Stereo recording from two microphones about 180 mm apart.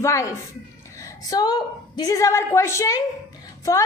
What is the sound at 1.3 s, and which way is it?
A woman's voice, 20° left (ahead or behind).